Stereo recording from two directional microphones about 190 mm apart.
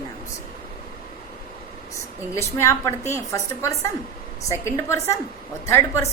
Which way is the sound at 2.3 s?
15° left (ahead or behind).